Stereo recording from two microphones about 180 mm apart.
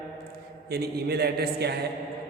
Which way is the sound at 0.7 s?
60° right (ahead or behind).